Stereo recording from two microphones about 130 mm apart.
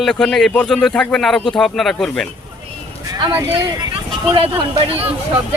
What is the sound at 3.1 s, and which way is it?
Speech, 35° right (ahead or behind).